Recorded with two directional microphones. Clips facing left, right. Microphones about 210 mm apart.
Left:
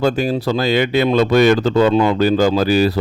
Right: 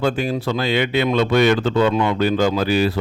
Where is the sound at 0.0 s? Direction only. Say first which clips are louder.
Left 3 dB; 40° left (ahead or behind).